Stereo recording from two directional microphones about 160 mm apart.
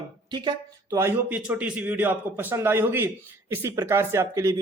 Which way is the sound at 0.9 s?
15° right (ahead or behind).